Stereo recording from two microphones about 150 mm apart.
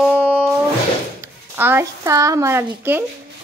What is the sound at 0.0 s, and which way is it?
Music, 5° right (ahead or behind).